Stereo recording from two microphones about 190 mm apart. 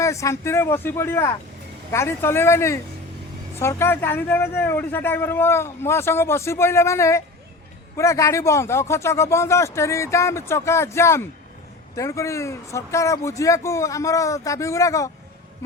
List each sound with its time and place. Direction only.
0.0 s a man's voice: 15° left (ahead or behind)